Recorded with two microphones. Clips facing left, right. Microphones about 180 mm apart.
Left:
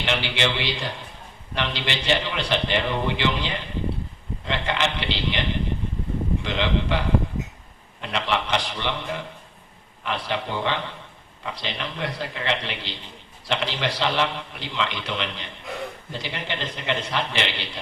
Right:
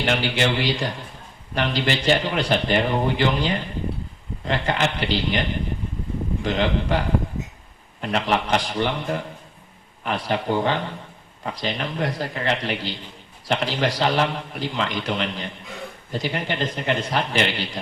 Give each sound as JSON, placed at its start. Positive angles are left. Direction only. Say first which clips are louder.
{"t": 0.0, "sound": "a man's voice", "louder": "right 3 dB", "side_deg": -45}
{"t": 8.0, "sound": "a man's voice", "louder": "right 3 dB", "side_deg": -45}